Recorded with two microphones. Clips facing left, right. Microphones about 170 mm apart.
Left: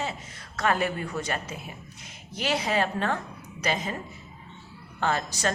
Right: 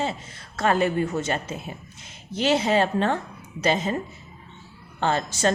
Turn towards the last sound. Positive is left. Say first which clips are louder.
# right 4 dB
turn(degrees=-25)  # may be behind; listen again after turning